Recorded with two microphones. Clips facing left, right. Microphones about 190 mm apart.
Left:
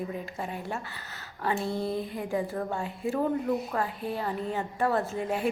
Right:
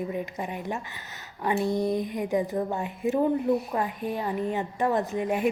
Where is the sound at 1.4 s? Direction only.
15° right (ahead or behind).